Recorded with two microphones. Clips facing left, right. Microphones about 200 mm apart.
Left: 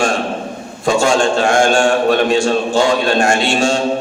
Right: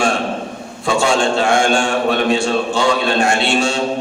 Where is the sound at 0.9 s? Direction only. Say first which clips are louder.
Left 2 dB; 45° left (ahead or behind).